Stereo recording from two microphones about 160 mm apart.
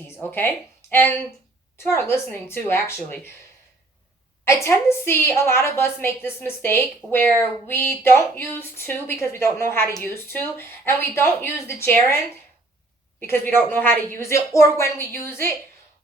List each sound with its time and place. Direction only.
0.1 s a woman's voice: 15° left (ahead or behind)
4.4 s a woman's voice: 15° left (ahead or behind)